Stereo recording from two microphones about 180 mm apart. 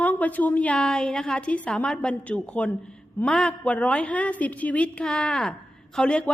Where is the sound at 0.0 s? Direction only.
10° left (ahead or behind).